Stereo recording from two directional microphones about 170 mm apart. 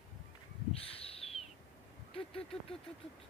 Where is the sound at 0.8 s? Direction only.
35° left (ahead or behind).